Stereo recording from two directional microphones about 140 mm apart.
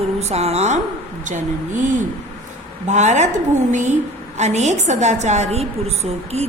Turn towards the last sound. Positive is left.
turn(degrees=-50)  # may be behind; listen again after turning